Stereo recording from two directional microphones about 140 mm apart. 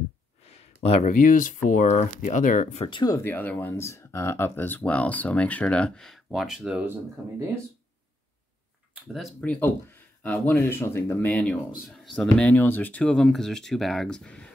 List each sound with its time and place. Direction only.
0.4 s a sound: 50° left (ahead or behind)
1.0 s speech: 70° left (ahead or behind)
2.8 s speech: 35° left (ahead or behind)
3.2 s speech: 15° left (ahead or behind); by 6.8 s 5° right (ahead or behind)
8.9 s speech: 5° right (ahead or behind)